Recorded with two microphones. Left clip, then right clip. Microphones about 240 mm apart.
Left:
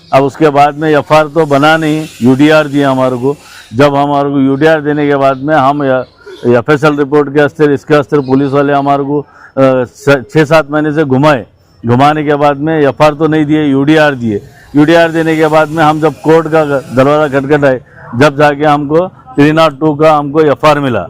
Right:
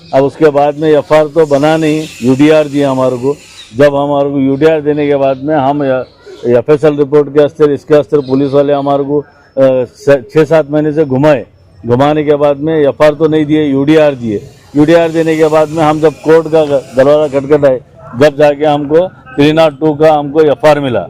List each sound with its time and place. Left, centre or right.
0.1 s a man's voice: left